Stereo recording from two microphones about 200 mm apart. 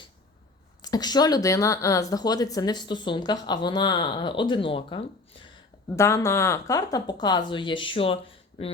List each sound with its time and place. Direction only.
0.8 s speech: 20° left (ahead or behind)
6.0 s speech: 15° left (ahead or behind)